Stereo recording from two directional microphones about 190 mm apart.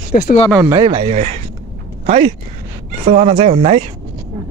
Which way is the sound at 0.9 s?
35° right (ahead or behind).